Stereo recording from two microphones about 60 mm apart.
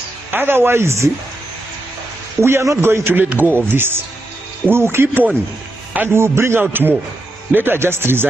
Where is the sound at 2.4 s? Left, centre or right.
Right.